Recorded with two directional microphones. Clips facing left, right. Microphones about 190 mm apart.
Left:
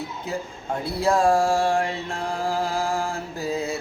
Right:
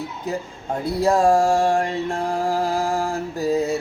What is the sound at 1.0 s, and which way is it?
Mantra, 40° right (ahead or behind).